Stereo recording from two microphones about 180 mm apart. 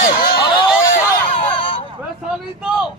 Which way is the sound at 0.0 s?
50° left (ahead or behind).